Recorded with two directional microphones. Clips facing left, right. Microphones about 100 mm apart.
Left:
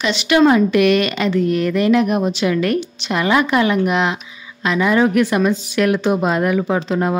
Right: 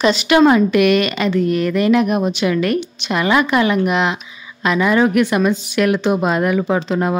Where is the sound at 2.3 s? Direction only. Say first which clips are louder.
Even; 60° right (ahead or behind).